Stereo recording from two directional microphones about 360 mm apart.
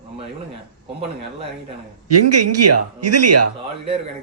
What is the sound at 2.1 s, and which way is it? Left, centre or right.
A man's voice, right.